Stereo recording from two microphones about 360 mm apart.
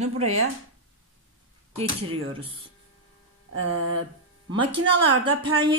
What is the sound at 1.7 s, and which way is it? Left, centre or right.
Speech, centre.